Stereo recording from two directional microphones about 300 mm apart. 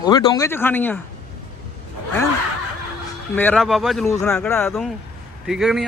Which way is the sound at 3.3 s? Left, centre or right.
Centre.